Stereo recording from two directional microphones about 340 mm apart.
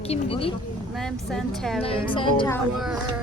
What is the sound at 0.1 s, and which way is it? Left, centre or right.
Speech, centre.